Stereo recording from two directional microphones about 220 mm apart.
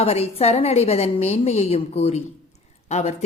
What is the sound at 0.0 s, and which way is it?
A woman's voice, 25° left (ahead or behind).